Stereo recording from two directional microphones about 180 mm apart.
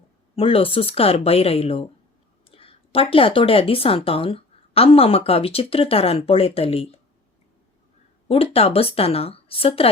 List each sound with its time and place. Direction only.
0.3 s a woman's voice: 30° left (ahead or behind)
8.3 s a woman's voice: 30° left (ahead or behind)